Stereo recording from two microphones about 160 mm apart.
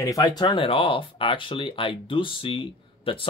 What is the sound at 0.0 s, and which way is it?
Speech, 20° left (ahead or behind).